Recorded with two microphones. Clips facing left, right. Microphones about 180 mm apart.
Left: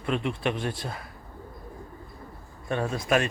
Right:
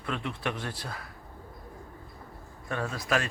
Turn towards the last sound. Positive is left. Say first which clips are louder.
# left 5 dB
turn(degrees=20)  # may be behind; listen again after turning